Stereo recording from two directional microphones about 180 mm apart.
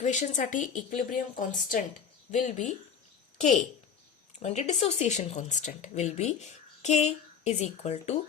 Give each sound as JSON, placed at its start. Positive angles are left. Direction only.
{"t": 0.0, "sound": "speech", "side_deg": 40}